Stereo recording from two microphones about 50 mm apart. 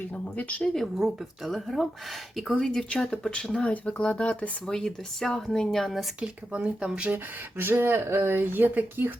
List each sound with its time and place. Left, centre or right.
0.3 s speech: left
0.6 s speech: centre
3.7 s speech: left
4.6 s speech: centre
6.1 s speech: right
7.6 s speech: right